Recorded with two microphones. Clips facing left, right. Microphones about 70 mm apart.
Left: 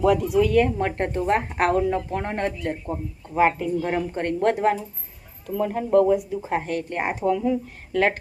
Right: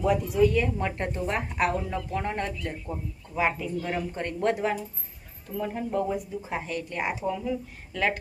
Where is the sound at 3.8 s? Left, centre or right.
Left.